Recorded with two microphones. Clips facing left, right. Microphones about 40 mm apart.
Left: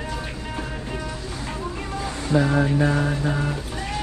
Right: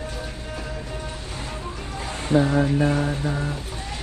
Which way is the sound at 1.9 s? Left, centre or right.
Right.